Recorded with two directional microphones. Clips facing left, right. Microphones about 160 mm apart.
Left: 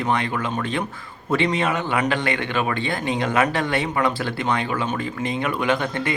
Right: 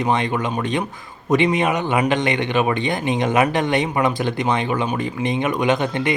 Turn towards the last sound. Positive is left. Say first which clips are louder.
# right 3 dB
turn(degrees=-20)  # may be behind; listen again after turning